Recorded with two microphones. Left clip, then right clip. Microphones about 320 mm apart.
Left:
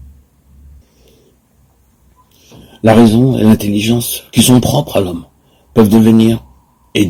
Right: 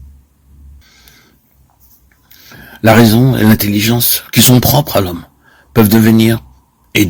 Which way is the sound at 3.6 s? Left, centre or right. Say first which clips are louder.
Right 1 dB; right.